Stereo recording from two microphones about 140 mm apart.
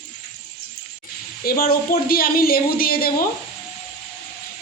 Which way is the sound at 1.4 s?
90° left.